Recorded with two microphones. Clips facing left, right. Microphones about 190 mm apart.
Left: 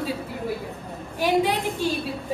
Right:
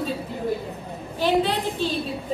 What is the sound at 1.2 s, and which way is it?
Speech, 15° left (ahead or behind).